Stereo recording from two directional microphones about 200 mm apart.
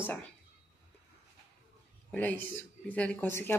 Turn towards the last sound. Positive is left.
turn(degrees=10)  # may be behind; listen again after turning